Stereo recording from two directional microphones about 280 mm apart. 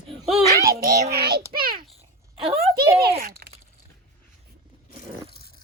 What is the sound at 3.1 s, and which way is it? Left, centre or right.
Crunch, right.